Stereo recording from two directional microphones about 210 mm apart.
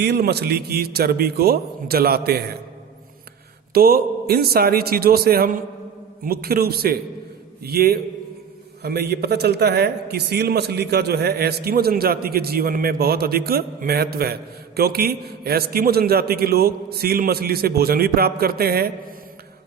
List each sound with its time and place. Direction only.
0.0 s a man's voice: 50° right (ahead or behind)
3.8 s a man's voice: 45° right (ahead or behind)